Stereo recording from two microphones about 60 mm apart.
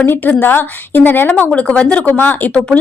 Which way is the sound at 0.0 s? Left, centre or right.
Left.